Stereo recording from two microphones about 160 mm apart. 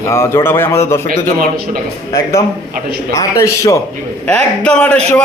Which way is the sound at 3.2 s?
20° left (ahead or behind).